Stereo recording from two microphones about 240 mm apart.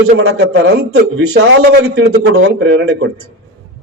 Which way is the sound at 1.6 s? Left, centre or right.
Right.